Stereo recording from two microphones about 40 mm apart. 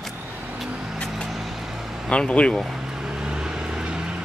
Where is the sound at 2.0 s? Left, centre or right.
Left.